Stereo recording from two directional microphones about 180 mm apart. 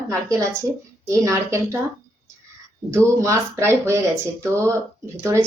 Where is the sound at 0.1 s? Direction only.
15° right (ahead or behind).